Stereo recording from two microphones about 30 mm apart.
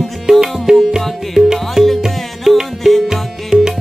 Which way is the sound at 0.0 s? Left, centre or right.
Centre.